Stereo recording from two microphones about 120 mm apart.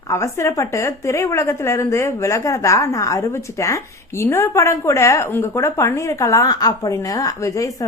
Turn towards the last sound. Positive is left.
turn(degrees=25)  # may be behind; listen again after turning